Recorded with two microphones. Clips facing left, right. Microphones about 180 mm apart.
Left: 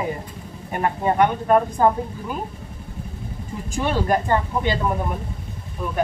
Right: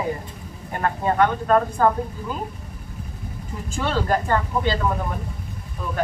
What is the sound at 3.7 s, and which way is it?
Speech, 15° left (ahead or behind).